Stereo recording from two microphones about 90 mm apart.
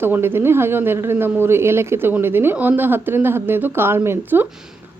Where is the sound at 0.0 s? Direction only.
25° right (ahead or behind).